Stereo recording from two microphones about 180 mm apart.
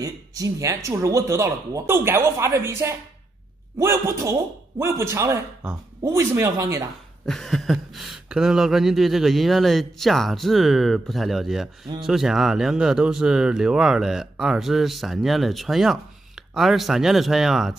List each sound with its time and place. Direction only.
0.0 s speech: 20° right (ahead or behind)
7.2 s speech: centre (ahead or behind)